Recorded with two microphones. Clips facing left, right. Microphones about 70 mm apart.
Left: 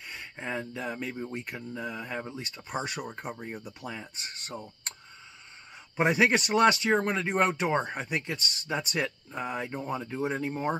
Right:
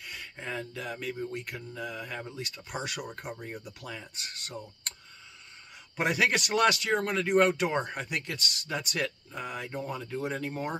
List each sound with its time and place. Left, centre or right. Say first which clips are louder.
0.0 s speech: left 2 dB; left
5.9 s speech: left 3 dB; left